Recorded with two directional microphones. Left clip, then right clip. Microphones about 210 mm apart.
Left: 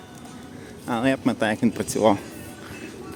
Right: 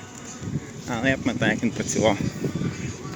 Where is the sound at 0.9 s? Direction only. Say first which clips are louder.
Left 1 dB; 20° left (ahead or behind).